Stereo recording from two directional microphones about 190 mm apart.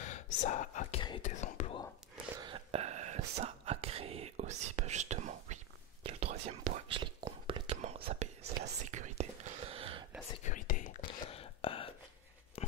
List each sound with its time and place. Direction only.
0.0 s speech: 40° left (ahead or behind)
1.2 s whispering: 40° left (ahead or behind)
2.4 s whispering: 30° right (ahead or behind)
10.4 s whispering: 40° left (ahead or behind)
11.3 s a sound: 30° left (ahead or behind)